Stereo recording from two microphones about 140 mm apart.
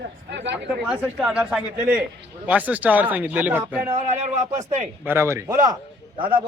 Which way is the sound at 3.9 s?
55° right (ahead or behind).